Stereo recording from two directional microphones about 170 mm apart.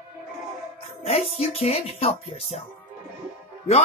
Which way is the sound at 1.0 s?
35° left (ahead or behind).